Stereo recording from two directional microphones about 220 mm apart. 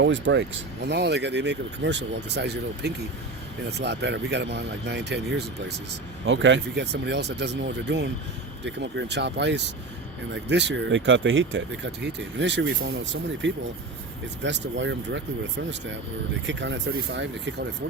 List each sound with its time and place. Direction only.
0.0 s speech: 55° right (ahead or behind)